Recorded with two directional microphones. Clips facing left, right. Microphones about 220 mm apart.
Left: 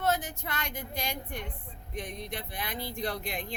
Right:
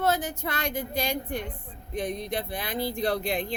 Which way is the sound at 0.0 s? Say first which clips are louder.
Right 4 dB; 35° right (ahead or behind).